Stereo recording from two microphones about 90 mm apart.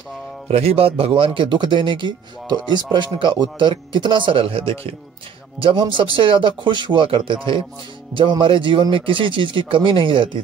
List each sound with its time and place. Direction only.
0.7 s speech: 90° right
5.6 s speech: 70° right (ahead or behind)